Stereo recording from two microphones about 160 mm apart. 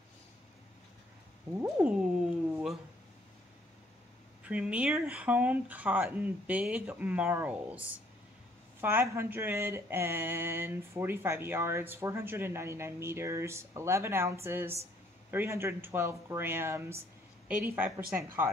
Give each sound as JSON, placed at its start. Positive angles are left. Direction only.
{"t": 1.6, "sound": "speech", "side_deg": -5}
{"t": 2.5, "sound": "a sound", "side_deg": 0}
{"t": 4.5, "sound": "speech", "side_deg": -10}
{"t": 8.8, "sound": "speech", "side_deg": -15}